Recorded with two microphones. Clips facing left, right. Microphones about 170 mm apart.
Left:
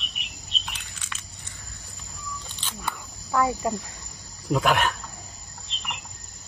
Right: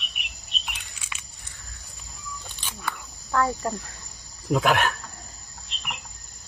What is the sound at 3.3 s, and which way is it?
Speech, 10° left (ahead or behind).